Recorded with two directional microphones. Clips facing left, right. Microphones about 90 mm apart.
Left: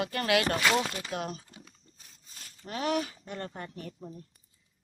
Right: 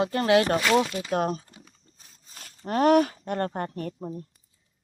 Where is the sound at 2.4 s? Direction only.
55° right (ahead or behind).